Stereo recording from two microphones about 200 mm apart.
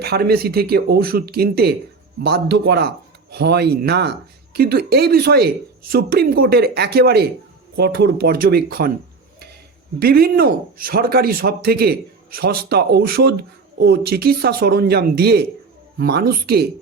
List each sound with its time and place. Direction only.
0.0 s speech: 50° right (ahead or behind)
10.0 s speech: 50° right (ahead or behind)